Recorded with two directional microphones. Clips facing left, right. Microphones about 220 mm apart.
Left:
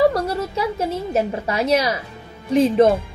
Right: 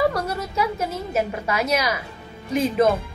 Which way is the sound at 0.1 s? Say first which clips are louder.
Left 4 dB; 30° left (ahead or behind).